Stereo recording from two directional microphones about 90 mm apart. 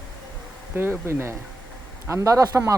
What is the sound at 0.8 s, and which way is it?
Speech, 30° right (ahead or behind).